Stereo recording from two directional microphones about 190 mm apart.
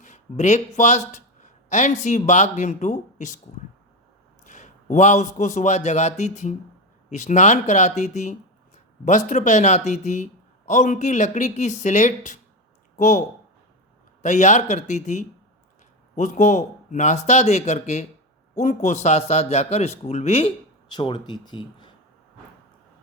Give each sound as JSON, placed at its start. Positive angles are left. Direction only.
{"t": 0.0, "sound": "speech", "side_deg": 40}
{"t": 4.4, "sound": "a man's voice", "side_deg": 40}